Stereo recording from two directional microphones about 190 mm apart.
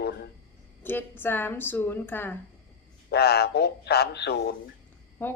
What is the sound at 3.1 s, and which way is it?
Speech, 55° left (ahead or behind).